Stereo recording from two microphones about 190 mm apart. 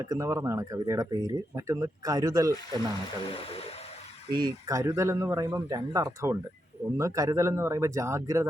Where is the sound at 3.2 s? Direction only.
30° left (ahead or behind).